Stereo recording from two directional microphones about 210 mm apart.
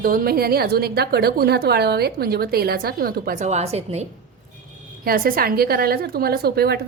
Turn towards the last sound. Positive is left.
turn(degrees=-50)  # may be behind; listen again after turning